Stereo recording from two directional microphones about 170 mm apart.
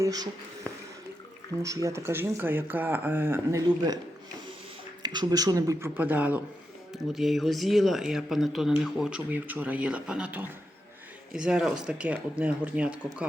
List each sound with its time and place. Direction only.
0.0 s speech: 20° right (ahead or behind)
1.6 s speech: 20° right (ahead or behind)
5.0 s speech: 25° right (ahead or behind); by 13.2 s 5° right (ahead or behind)